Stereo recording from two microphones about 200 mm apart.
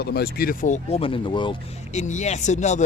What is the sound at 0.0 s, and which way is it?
Speech, 55° left (ahead or behind).